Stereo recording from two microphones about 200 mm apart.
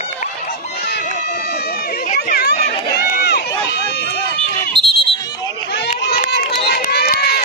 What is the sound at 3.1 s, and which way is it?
Run, 55° left (ahead or behind).